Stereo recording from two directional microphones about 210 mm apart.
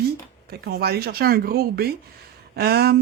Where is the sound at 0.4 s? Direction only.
50° right (ahead or behind).